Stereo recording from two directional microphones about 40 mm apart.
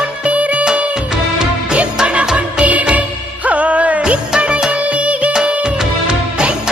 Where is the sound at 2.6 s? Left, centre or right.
Right.